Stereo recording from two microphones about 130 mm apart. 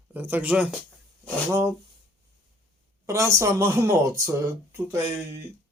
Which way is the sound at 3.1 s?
20° right (ahead or behind).